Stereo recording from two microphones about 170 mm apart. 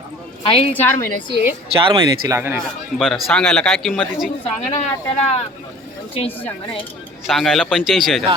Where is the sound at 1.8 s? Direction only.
25° right (ahead or behind).